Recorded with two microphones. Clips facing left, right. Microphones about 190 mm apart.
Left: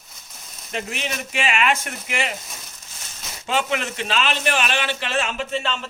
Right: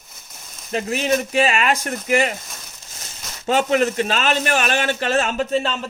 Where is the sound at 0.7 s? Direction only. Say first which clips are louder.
Right 9 dB; 40° right (ahead or behind).